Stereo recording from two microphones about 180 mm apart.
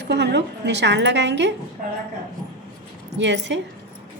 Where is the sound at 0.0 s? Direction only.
70° right (ahead or behind).